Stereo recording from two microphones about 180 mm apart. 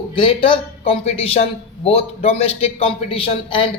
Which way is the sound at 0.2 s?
30° left (ahead or behind).